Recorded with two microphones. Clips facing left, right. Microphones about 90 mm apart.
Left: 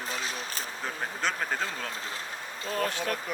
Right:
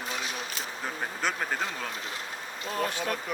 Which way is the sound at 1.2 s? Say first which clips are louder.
Even; 5° right (ahead or behind).